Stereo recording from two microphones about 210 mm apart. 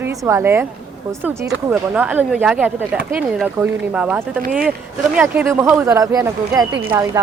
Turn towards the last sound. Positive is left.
turn(degrees=-15)  # may be behind; listen again after turning